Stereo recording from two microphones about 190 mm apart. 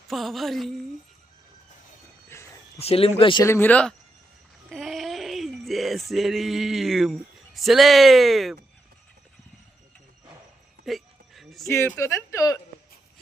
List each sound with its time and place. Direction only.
0.1 s a sound: centre (ahead or behind)
2.3 s cricket: 15° left (ahead or behind)
2.7 s speech: 30° left (ahead or behind)
3.4 s speech: 10° left (ahead or behind)
4.7 s male singing: centre (ahead or behind)
10.8 s a sound: centre (ahead or behind)
11.7 s speech: 15° left (ahead or behind)